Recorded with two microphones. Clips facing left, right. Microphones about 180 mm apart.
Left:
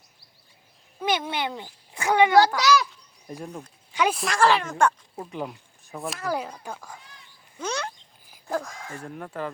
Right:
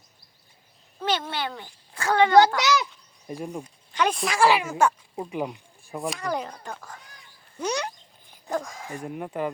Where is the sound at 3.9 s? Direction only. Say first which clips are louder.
Even; 5° left (ahead or behind); by 5.5 s 10° right (ahead or behind).